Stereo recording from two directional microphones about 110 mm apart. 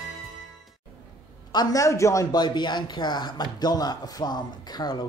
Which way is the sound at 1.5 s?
35° left (ahead or behind).